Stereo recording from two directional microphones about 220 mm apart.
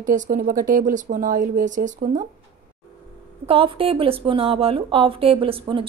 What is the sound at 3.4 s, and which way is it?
A woman's voice, 25° right (ahead or behind).